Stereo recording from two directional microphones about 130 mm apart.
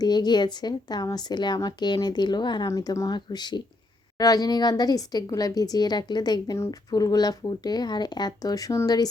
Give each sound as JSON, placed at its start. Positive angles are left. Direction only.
{"t": 0.0, "sound": "a woman's voice", "side_deg": 35}